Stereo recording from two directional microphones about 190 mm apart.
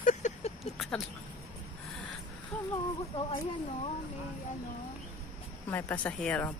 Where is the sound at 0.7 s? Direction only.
Centre (ahead or behind).